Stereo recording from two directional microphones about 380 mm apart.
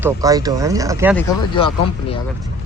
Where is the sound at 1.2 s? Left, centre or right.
Centre.